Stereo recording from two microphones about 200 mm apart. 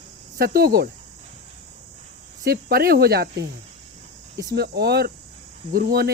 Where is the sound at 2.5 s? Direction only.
50° right (ahead or behind).